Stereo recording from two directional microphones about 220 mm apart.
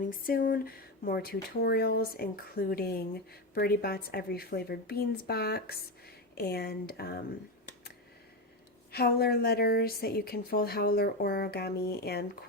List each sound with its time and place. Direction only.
0.0 s a woman's voice: 40° left (ahead or behind)
8.9 s a woman's voice: 45° left (ahead or behind)